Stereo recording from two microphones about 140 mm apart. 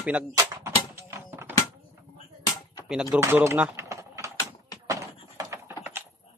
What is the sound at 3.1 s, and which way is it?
Speech, 15° right (ahead or behind).